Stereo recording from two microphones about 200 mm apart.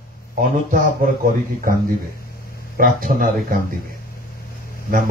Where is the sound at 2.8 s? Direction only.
45° right (ahead or behind).